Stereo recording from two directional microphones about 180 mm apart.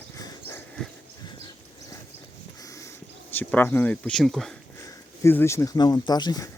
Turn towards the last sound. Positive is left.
turn(degrees=20)  # may be behind; listen again after turning